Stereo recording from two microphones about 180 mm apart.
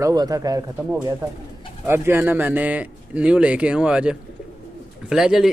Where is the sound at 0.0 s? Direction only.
20° right (ahead or behind).